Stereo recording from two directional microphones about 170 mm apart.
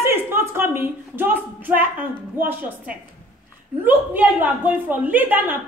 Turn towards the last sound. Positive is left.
turn(degrees=-10)  # may be behind; listen again after turning